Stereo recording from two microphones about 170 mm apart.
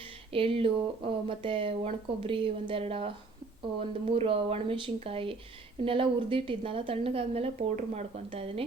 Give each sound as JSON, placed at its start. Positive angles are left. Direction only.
{"t": 0.3, "sound": "a woman's voice", "side_deg": -35}